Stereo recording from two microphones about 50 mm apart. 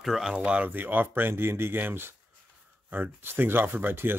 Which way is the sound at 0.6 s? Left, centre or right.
Right.